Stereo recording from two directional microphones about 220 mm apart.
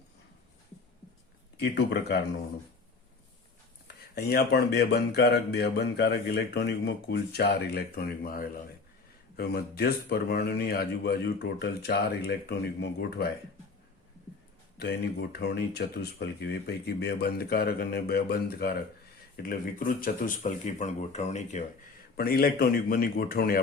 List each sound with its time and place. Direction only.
1.5 s speech: 50° left (ahead or behind)
3.8 s speech: 45° left (ahead or behind)
14.8 s speech: 50° left (ahead or behind); by 21.6 s 30° left (ahead or behind)
22.1 s speech: 45° left (ahead or behind)